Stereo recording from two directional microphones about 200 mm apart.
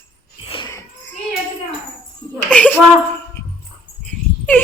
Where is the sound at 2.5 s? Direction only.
10° left (ahead or behind).